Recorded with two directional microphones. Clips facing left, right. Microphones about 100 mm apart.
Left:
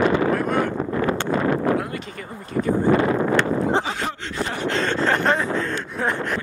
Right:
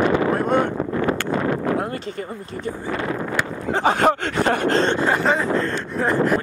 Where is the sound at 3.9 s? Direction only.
55° right (ahead or behind).